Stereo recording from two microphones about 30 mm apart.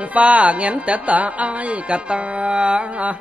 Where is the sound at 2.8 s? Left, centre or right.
Right.